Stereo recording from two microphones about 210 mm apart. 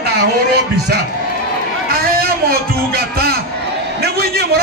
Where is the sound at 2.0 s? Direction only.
45° right (ahead or behind).